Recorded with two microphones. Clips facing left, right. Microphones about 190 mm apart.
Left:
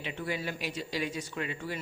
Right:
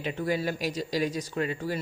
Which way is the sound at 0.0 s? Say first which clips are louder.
Right 6 dB; 40° right (ahead or behind).